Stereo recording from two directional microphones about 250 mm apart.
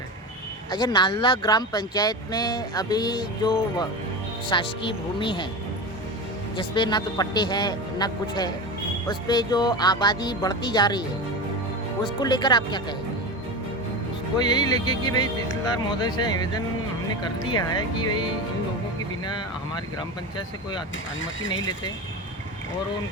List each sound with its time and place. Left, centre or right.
0.7 s speech: centre
6.6 s speech: centre
12.2 s speech: centre
14.3 s speech: centre